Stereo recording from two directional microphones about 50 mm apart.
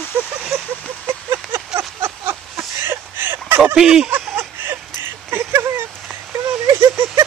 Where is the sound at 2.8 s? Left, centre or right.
Right.